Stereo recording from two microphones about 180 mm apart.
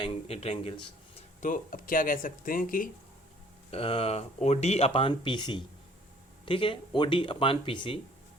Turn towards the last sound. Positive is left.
turn(degrees=30)  # may be behind; listen again after turning